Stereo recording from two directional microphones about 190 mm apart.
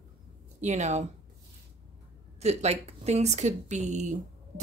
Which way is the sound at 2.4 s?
35° right (ahead or behind).